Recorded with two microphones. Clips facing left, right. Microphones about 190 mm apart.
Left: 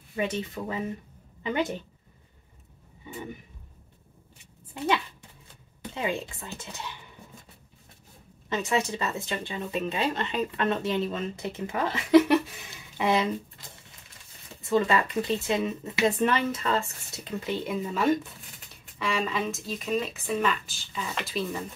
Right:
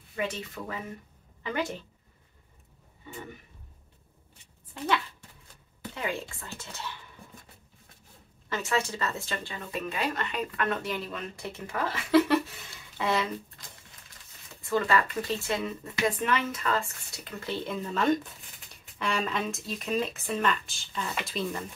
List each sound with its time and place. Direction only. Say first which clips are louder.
0.1 s speech: left 4 dB; 20° left (ahead or behind)
5.9 s speech: left 3 dB; 20° left (ahead or behind)
8.5 s speech: left 3 dB; 20° left (ahead or behind)
14.6 s speech: left 2 dB; 20° left (ahead or behind); by 21.6 s 5° left (ahead or behind)